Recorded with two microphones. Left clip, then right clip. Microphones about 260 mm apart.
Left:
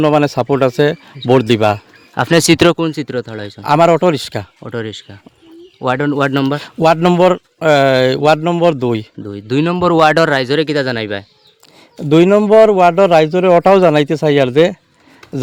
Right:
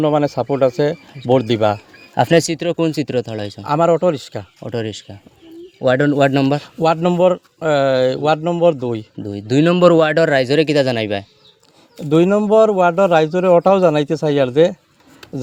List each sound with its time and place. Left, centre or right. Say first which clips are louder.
0.0 s a man's voice: left 4 dB; left
2.1 s speech: even; centre
2.4 s a man's voice: left 10 dB; left
2.7 s speech: even; centre
3.6 s a man's voice: left 5 dB; left
4.6 s speech: left 1 dB; centre
6.6 s a man's voice: left 4 dB; left
9.2 s speech: right 2 dB; centre
10.0 s speech: left 3 dB; left; by 11.3 s centre
12.0 s a man's voice: left 5 dB; left